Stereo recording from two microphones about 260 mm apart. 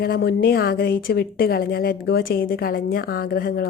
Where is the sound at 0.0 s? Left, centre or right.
Left.